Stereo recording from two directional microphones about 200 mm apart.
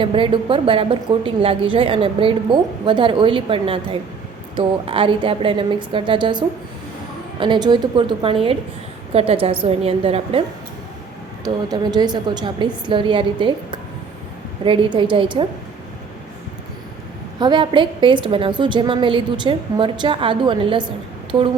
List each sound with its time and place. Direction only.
0.0 s a woman's voice: 25° right (ahead or behind)
11.4 s a woman's voice: 20° right (ahead or behind)
17.4 s a woman's voice: 25° right (ahead or behind)